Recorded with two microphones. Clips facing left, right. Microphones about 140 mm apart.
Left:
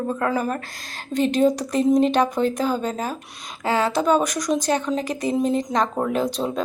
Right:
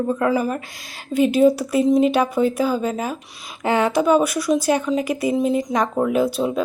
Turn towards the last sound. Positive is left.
turn(degrees=-5)  # may be behind; listen again after turning